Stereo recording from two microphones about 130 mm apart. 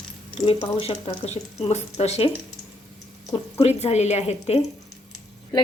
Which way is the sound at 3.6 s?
55° left (ahead or behind).